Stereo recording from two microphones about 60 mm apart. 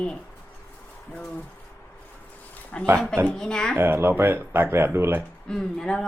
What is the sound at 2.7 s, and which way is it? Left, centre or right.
Speech, centre.